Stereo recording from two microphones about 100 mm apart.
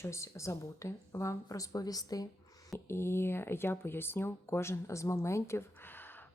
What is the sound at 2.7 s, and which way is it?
Speech, 25° left (ahead or behind).